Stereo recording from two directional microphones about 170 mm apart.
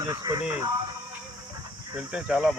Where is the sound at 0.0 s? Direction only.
20° right (ahead or behind).